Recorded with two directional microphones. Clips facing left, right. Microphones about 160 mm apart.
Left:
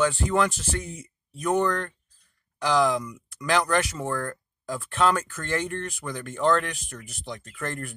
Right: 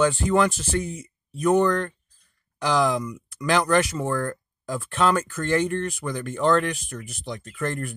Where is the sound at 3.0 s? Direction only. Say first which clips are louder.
Right 4 dB; 25° right (ahead or behind).